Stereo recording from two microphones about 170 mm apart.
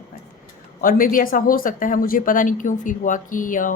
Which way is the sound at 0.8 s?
55° left (ahead or behind).